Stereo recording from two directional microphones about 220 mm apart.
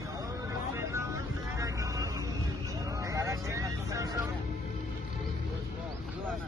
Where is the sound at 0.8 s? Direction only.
15° right (ahead or behind).